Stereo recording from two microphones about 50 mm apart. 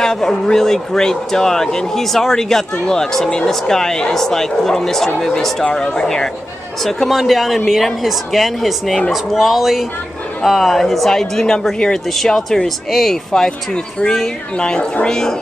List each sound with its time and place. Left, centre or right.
0.0 s a man's voice: centre
14.6 s a woman's voice: left